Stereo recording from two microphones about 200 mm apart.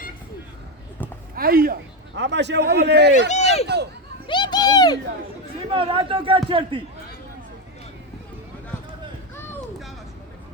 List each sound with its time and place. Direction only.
1.4 s a man's voice: 45° right (ahead or behind)
3.2 s speech: 35° left (ahead or behind)
4.3 s a sound: 20° left (ahead or behind)
5.7 s a man's voice: 25° right (ahead or behind)